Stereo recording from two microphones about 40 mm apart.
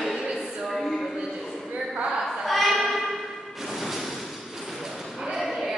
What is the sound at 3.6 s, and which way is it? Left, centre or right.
Music, centre.